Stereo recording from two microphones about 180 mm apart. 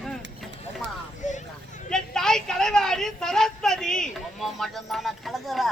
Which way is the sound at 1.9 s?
5° left (ahead or behind).